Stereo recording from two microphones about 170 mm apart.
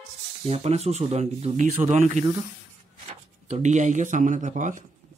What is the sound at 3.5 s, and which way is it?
Speech, 45° right (ahead or behind).